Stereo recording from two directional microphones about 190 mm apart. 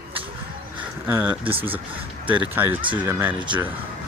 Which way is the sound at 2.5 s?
10° right (ahead or behind).